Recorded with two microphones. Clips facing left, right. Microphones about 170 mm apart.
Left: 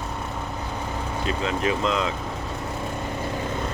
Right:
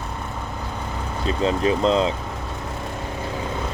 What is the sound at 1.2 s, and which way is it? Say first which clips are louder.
Speech: right 5 dB; 35° right (ahead or behind).